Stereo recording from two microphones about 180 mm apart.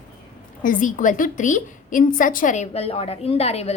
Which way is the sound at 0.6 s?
45° left (ahead or behind).